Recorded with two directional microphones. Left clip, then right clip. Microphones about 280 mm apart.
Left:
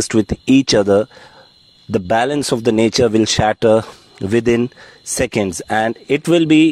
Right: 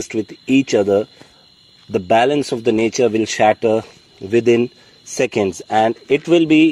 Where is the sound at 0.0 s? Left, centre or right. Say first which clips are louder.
Left 6 dB; left.